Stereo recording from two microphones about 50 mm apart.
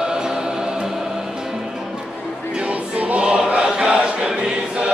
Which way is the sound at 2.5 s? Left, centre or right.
Right.